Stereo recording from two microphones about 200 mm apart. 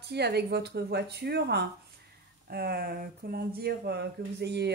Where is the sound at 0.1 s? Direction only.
55° right (ahead or behind).